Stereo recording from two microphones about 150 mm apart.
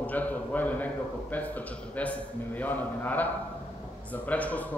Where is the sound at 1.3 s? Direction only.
10° left (ahead or behind).